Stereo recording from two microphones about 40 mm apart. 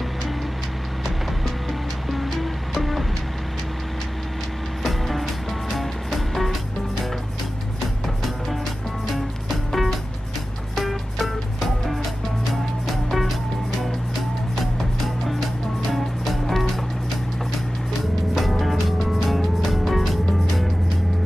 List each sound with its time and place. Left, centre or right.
1.7 s music: centre
4.8 s music: centre
9.0 s music: centre
15.9 s music: centre
18.3 s music: centre